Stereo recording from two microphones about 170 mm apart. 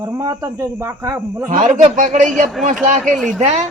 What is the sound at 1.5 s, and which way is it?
Speech, 45° right (ahead or behind).